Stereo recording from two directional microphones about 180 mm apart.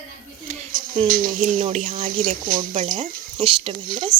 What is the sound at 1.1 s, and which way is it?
Speech, 50° right (ahead or behind).